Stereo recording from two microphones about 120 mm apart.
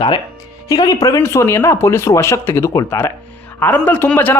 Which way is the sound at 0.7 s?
35° left (ahead or behind).